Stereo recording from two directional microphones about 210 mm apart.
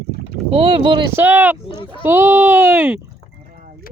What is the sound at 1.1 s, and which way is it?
Speech, 10° right (ahead or behind).